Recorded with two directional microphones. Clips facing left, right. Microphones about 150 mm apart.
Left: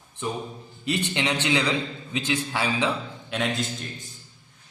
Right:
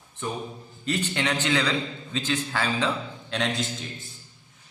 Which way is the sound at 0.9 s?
15° left (ahead or behind).